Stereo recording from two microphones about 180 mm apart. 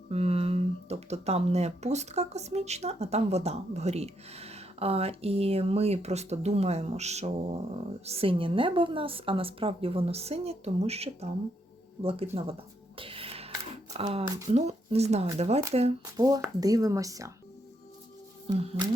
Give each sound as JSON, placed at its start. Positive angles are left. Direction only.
{"t": 0.1, "sound": "speech", "side_deg": -35}
{"t": 13.0, "sound": "a sound", "side_deg": -30}
{"t": 13.9, "sound": "speech", "side_deg": -35}
{"t": 16.1, "sound": "speech", "side_deg": -20}
{"t": 18.4, "sound": "speech", "side_deg": -30}